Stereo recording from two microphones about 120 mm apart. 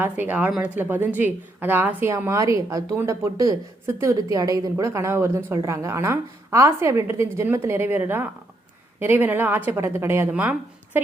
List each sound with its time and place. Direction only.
0.0 s a woman's voice: 15° right (ahead or behind)